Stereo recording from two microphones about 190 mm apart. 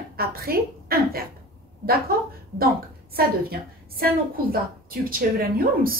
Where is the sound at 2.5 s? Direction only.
55° right (ahead or behind).